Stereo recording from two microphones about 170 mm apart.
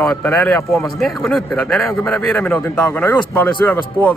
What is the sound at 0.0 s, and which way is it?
A man's voice, 10° left (ahead or behind).